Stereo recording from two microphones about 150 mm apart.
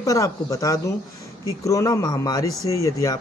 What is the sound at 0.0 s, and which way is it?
Speech, 20° left (ahead or behind).